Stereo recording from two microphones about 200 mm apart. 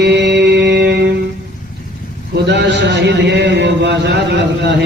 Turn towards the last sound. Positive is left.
turn(degrees=-60)  # may be behind; listen again after turning